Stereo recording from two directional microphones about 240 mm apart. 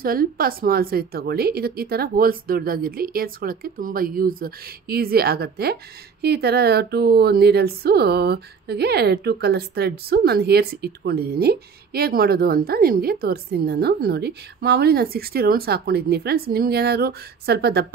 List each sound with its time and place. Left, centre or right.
0.0 s speech: right